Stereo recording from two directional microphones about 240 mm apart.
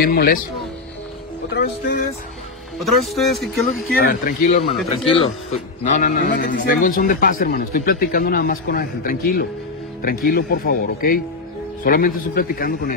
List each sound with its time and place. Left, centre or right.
0.0 s a man's voice: left
1.5 s a man's voice: left
2.8 s a man's voice: centre
4.0 s a man's voice: left
4.9 s a man's voice: left